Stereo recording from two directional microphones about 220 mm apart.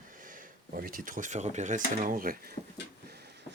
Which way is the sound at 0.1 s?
35° right (ahead or behind).